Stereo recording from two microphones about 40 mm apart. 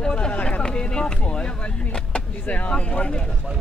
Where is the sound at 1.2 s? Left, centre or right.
Left.